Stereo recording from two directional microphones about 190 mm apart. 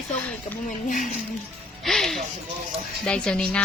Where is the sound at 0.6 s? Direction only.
45° left (ahead or behind).